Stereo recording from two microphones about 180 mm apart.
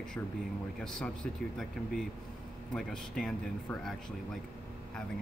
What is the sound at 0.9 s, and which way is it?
Speech, 5° left (ahead or behind).